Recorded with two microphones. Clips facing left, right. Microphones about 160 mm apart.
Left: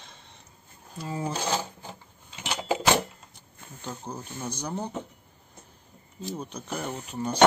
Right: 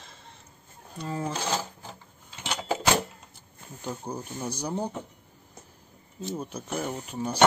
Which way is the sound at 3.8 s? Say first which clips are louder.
Right 3 dB; 10° right (ahead or behind).